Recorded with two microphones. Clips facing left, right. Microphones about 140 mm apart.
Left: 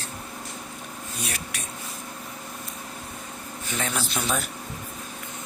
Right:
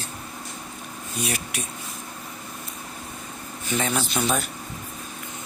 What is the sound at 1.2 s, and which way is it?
Speech, 10° right (ahead or behind).